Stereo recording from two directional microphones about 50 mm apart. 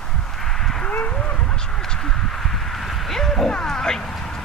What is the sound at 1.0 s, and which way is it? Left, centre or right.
Duck, centre.